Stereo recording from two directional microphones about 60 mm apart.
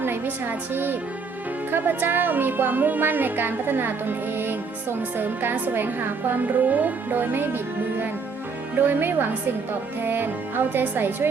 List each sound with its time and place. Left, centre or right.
0.0 s a woman's voice: right